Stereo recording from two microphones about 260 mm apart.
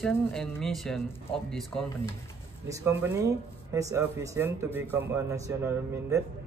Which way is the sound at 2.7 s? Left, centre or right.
Centre.